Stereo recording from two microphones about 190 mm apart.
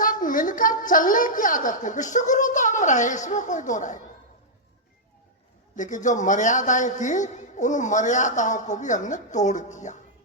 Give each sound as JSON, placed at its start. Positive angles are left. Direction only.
{"t": 0.0, "sound": "a man's voice", "side_deg": 45}
{"t": 5.7, "sound": "a man's voice", "side_deg": 40}